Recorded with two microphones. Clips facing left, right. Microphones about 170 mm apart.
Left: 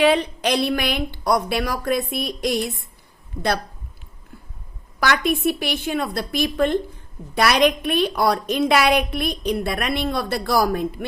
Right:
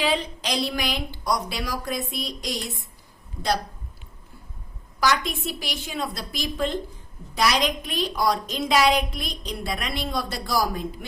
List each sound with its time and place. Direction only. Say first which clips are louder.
0.0 s a woman's voice: left 8 dB; 60° left (ahead or behind)
4.9 s a woman's voice: left 3 dB; 60° left (ahead or behind)